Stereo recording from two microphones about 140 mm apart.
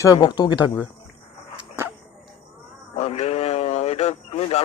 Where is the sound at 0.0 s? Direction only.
30° left (ahead or behind).